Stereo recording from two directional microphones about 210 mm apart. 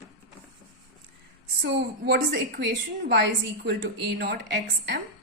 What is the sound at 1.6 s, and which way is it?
A woman's voice, 50° right (ahead or behind).